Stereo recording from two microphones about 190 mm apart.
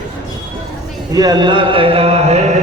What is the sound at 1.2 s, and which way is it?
Chant, 20° right (ahead or behind).